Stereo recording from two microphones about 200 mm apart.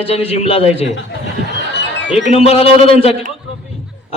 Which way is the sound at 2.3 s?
30° left (ahead or behind).